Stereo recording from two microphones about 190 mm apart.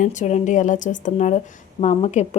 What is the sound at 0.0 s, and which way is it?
Speech, 40° left (ahead or behind).